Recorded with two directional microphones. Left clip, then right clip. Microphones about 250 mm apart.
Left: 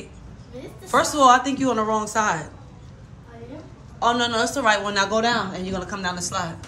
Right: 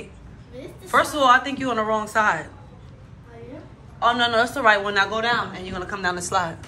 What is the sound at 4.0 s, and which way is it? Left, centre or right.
A woman's voice, centre.